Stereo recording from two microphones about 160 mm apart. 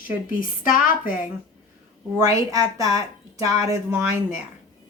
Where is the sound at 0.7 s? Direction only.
60° left (ahead or behind).